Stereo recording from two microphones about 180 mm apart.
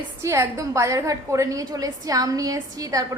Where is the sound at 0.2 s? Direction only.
15° right (ahead or behind).